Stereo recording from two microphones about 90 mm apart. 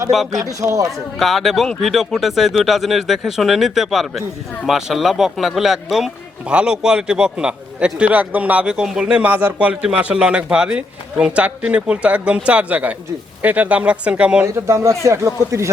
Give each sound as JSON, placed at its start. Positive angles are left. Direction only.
{"t": 0.1, "sound": "speech", "side_deg": 0}
{"t": 0.6, "sound": "a man's voice", "side_deg": -40}
{"t": 1.2, "sound": "a man's voice", "side_deg": 0}
{"t": 14.4, "sound": "a man's voice", "side_deg": -35}